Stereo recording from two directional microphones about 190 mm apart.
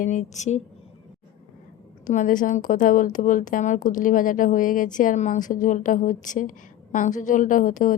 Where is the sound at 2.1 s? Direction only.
45° left (ahead or behind).